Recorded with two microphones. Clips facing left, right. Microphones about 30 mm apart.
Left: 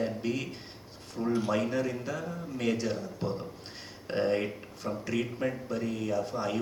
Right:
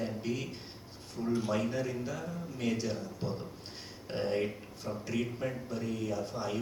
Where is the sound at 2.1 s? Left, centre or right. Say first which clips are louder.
Left 4 dB; left.